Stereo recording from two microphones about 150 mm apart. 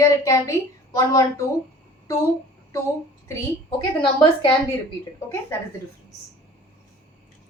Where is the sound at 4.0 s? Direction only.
35° left (ahead or behind).